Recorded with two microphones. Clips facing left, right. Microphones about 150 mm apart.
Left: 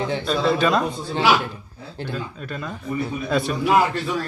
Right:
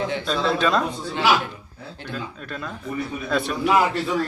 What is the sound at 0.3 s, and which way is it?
Speech, 5° left (ahead or behind).